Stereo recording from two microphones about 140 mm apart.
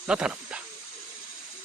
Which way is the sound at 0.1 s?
5° right (ahead or behind).